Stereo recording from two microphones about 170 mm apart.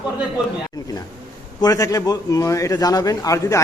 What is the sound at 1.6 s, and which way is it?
A man's voice, 20° left (ahead or behind).